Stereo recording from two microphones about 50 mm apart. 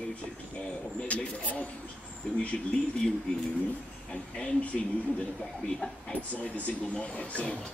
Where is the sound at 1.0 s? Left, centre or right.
Left.